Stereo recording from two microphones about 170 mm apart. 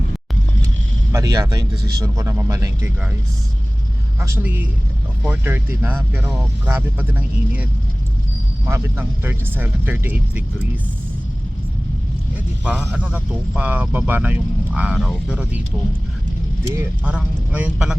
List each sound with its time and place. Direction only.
1.1 s speech: 20° right (ahead or behind)
4.2 s speech: 15° right (ahead or behind)
12.6 s speech: 5° right (ahead or behind)
16.6 s speech: 10° right (ahead or behind)